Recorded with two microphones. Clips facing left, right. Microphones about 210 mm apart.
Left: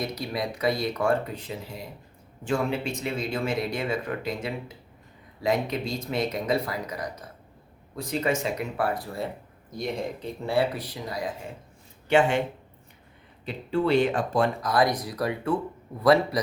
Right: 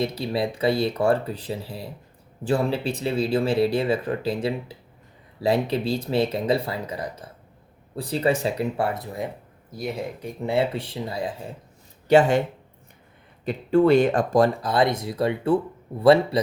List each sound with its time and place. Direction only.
0.0 s speech: 30° right (ahead or behind)
9.7 s speech: 5° right (ahead or behind); by 11.3 s 30° right (ahead or behind)
12.0 s speech: 40° right (ahead or behind)
13.4 s speech: 45° right (ahead or behind); by 16.4 s 30° right (ahead or behind)